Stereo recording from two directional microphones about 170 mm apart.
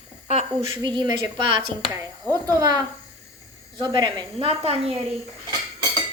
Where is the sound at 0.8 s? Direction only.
25° right (ahead or behind).